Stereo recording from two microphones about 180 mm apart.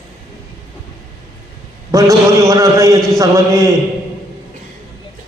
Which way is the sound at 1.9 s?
20° right (ahead or behind).